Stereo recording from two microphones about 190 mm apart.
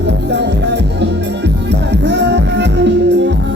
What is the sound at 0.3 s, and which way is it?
Music, 65° right (ahead or behind).